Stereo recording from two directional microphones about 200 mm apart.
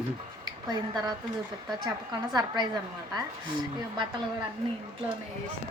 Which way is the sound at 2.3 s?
20° right (ahead or behind).